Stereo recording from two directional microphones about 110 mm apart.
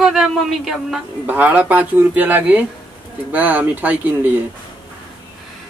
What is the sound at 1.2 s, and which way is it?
A man's voice, 15° right (ahead or behind).